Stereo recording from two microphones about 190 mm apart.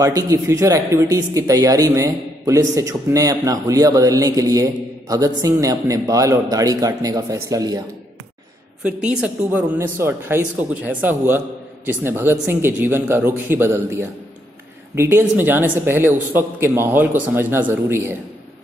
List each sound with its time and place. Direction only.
0.0 s speech: 15° right (ahead or behind)
8.8 s speech: 5° right (ahead or behind)